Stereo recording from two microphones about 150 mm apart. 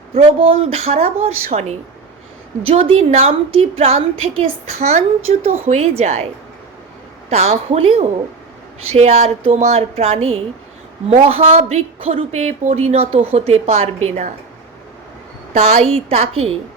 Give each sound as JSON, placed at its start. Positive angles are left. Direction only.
{"t": 0.3, "sound": "speech", "side_deg": -40}
{"t": 7.3, "sound": "speech", "side_deg": -45}
{"t": 15.5, "sound": "speech", "side_deg": -45}